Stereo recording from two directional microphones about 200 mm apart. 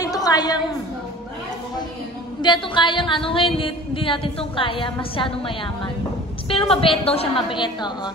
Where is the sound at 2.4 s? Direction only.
25° left (ahead or behind).